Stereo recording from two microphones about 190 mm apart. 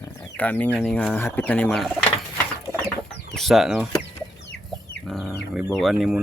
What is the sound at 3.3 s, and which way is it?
Speech, centre (ahead or behind).